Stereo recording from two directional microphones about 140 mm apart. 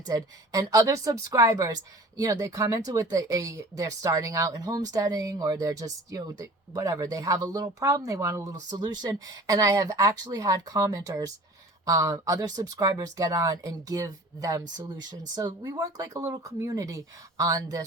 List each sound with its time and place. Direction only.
0.0 s speech: 25° right (ahead or behind)